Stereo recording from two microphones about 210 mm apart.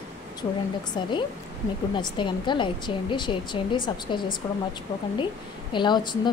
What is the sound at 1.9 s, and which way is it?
Speech, 20° left (ahead or behind).